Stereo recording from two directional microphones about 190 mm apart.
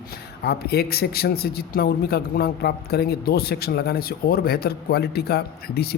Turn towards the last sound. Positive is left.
turn(degrees=55)  # may be behind; listen again after turning